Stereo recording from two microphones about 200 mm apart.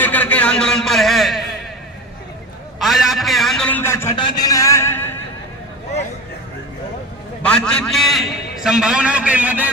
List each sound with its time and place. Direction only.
0.0 s a sound: 10° left (ahead or behind)
2.8 s a man's voice: centre (ahead or behind)
4.1 s a man's voice: 25° left (ahead or behind)
7.4 s a man's voice: 5° left (ahead or behind)